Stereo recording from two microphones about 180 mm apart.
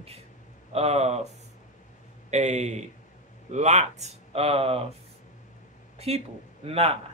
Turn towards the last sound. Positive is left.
turn(degrees=-35)  # may be behind; listen again after turning